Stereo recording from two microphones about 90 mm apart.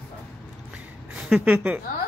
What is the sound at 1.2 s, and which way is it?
Speech, 10° right (ahead or behind).